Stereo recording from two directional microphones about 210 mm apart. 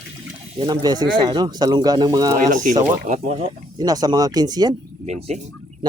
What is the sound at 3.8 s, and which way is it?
Speech, 20° right (ahead or behind).